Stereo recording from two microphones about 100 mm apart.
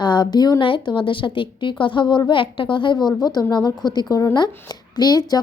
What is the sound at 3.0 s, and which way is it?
A woman's voice, 45° left (ahead or behind).